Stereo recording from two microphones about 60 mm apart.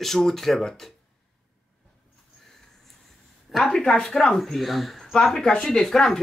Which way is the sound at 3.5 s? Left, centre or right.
Centre.